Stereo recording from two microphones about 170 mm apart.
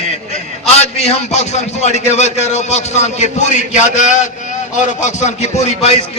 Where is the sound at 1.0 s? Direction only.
40° left (ahead or behind).